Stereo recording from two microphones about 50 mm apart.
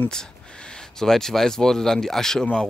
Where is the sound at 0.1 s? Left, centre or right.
Centre.